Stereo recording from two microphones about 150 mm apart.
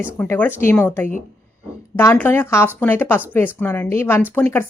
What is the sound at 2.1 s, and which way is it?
Speech, 15° left (ahead or behind).